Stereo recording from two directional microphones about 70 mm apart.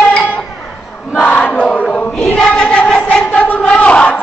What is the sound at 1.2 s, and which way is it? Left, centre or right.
Crowd, left.